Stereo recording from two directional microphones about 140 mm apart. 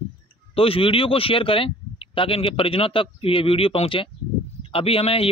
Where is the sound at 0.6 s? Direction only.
40° left (ahead or behind).